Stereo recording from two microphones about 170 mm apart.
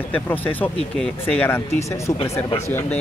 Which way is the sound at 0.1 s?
10° left (ahead or behind).